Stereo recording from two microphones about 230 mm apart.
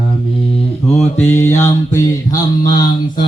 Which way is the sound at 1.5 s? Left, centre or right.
Centre.